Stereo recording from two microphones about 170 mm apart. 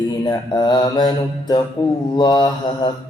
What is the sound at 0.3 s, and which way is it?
Mantra, 25° left (ahead or behind).